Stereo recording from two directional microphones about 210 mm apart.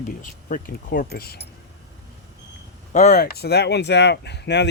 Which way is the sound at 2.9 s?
35° left (ahead or behind).